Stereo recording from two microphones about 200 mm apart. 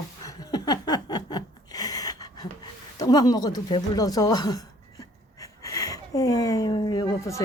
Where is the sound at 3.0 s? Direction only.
20° left (ahead or behind).